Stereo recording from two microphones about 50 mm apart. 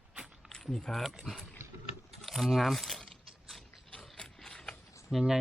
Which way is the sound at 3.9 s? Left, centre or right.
Centre.